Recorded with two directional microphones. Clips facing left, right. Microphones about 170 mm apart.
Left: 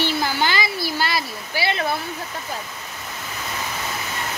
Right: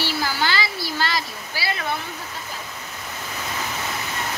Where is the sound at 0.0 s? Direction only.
20° left (ahead or behind).